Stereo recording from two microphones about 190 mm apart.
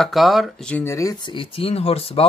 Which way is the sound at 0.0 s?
Centre (ahead or behind).